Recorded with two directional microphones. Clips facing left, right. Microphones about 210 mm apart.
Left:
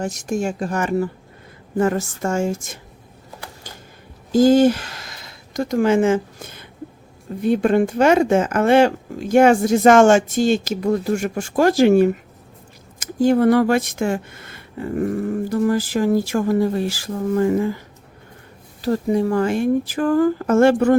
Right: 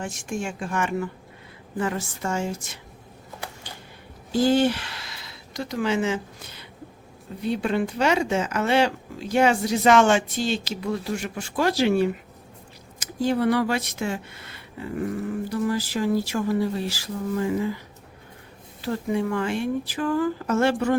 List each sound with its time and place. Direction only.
0.0 s speech: 40° left (ahead or behind)
4.3 s speech: 45° left (ahead or behind)
18.8 s speech: 40° left (ahead or behind)